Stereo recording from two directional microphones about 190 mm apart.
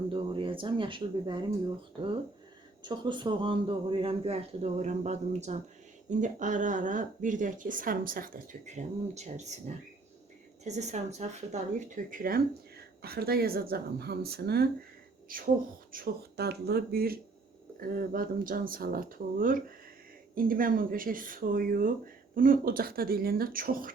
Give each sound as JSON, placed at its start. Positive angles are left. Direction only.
{"t": 0.1, "sound": "a man's voice", "side_deg": -25}
{"t": 2.8, "sound": "a man's voice", "side_deg": -25}